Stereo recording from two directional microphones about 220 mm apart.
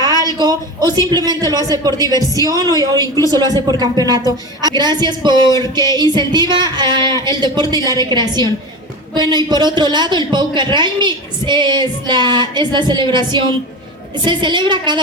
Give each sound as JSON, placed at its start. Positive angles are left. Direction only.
{"t": 0.0, "sound": "a woman's voice", "side_deg": -20}